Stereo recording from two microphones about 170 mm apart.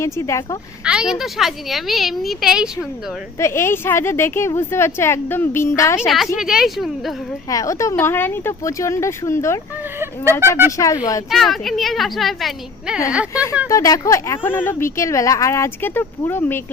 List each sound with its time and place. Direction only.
0.0 s speech: 15° left (ahead or behind)
0.9 s a woman's voice: 5° right (ahead or behind)
3.3 s speech: 15° left (ahead or behind)
6.1 s a woman's voice: centre (ahead or behind)
7.5 s speech: 20° left (ahead or behind)
10.7 s speech: 20° left (ahead or behind)
11.3 s a woman's voice: centre (ahead or behind)
13.3 s speech: 20° left (ahead or behind)